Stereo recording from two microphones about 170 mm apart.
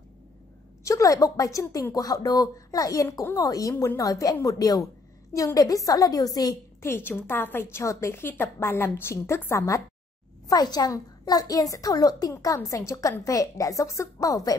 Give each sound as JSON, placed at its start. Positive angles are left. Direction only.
{"t": 0.8, "sound": "a woman's voice", "side_deg": 20}